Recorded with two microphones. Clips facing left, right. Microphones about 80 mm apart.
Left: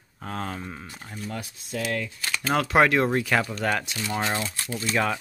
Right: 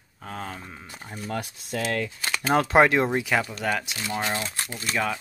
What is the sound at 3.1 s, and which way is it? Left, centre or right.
Speech, centre.